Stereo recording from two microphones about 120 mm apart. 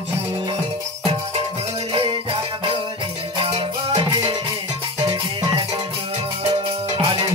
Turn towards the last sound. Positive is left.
turn(degrees=-50)  # may be behind; listen again after turning